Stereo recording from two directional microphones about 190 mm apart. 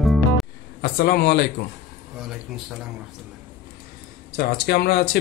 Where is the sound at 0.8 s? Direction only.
55° left (ahead or behind).